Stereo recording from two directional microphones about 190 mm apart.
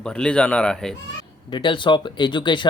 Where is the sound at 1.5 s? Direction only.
25° left (ahead or behind).